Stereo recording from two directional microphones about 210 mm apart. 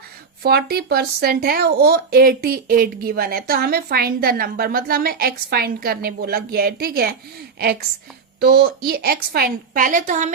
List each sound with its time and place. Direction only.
0.4 s speech: 50° right (ahead or behind)
8.4 s speech: 50° right (ahead or behind)